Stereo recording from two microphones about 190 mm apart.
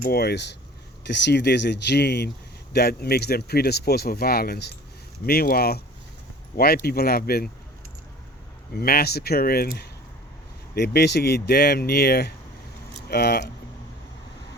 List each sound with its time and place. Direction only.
0.0 s speech: 55° left (ahead or behind)
6.8 s speech: 55° left (ahead or behind)
8.7 s speech: 50° left (ahead or behind)